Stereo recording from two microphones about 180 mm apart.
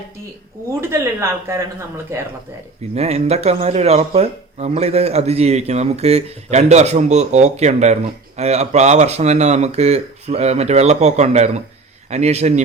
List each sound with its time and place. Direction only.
0.8 s speech: 15° right (ahead or behind)
2.9 s speech: 35° right (ahead or behind)